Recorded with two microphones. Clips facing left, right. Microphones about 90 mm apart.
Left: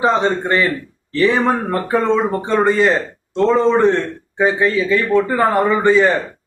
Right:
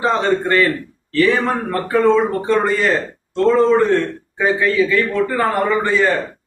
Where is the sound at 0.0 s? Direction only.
20° left (ahead or behind).